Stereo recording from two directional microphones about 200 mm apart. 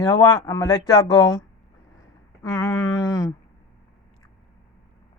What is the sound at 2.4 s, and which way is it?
Speech, 15° left (ahead or behind).